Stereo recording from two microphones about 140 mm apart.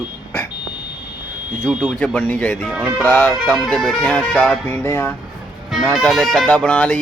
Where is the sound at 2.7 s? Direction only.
10° right (ahead or behind).